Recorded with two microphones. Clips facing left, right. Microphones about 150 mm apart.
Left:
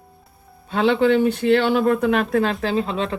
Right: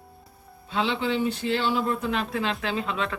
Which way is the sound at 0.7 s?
55° left (ahead or behind).